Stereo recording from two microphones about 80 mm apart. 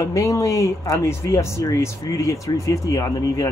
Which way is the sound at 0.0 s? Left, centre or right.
Left.